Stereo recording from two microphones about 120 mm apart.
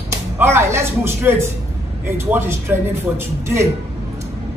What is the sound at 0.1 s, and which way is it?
Speech, 20° right (ahead or behind).